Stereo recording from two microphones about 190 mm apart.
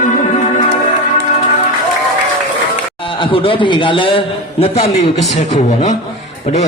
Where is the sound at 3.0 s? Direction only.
25° left (ahead or behind).